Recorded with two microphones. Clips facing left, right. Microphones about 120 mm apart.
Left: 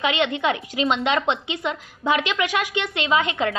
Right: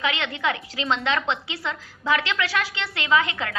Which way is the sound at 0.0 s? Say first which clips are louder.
Left 4 dB; 20° left (ahead or behind).